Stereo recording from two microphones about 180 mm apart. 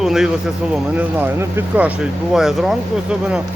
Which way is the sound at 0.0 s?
Centre (ahead or behind).